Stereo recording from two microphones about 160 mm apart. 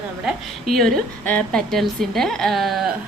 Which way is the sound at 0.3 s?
Centre (ahead or behind).